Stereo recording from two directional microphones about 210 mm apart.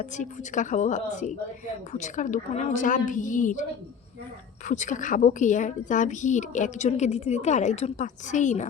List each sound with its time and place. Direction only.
0.0 s a woman's voice: 35° left (ahead or behind)